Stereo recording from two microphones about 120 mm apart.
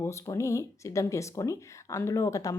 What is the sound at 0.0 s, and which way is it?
Speech, 25° left (ahead or behind).